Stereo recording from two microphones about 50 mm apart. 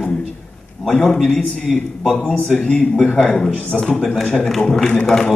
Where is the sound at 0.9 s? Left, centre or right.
Left.